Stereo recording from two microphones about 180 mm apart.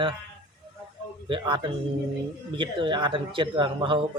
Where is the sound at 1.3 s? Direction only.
25° right (ahead or behind).